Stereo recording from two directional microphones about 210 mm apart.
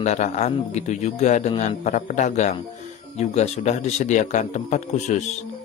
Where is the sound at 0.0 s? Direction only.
35° left (ahead or behind).